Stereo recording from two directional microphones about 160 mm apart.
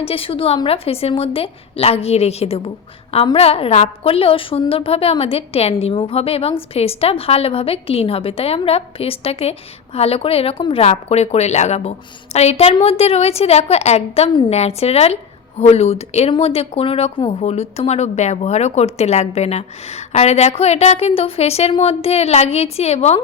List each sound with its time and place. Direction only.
0.0 s a woman's voice: 35° left (ahead or behind)